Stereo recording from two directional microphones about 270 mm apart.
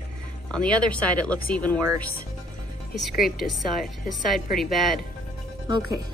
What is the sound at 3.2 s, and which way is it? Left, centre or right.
Speech, centre.